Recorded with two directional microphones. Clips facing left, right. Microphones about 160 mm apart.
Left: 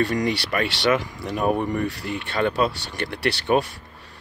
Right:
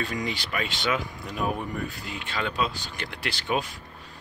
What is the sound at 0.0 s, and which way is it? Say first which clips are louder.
Speech: left 8 dB; 65° left (ahead or behind).